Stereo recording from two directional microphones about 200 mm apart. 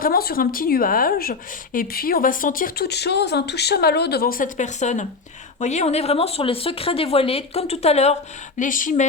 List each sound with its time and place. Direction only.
0.0 s speech: 50° left (ahead or behind)